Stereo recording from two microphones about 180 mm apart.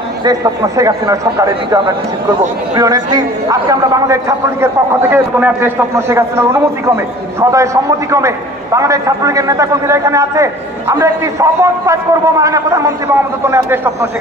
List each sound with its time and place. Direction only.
0.2 s a man's voice: 20° right (ahead or behind)